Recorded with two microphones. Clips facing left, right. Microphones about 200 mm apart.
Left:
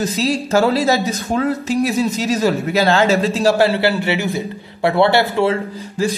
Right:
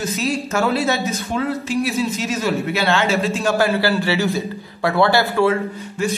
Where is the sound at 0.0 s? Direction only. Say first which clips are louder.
Left 3 dB; 35° left (ahead or behind).